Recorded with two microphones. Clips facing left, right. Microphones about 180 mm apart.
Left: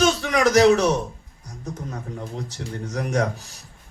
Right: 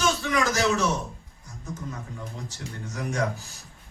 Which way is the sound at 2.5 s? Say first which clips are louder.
Left 6 dB; 70° left (ahead or behind).